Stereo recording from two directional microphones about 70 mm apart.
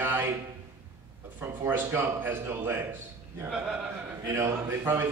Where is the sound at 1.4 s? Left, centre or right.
Right.